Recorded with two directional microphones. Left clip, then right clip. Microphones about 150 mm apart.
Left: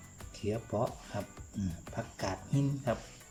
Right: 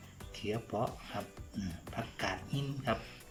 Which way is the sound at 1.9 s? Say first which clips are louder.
Right 1 dB; 30° left (ahead or behind).